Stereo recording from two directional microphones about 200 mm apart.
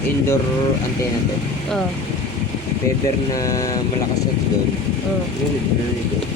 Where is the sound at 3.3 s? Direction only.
15° left (ahead or behind).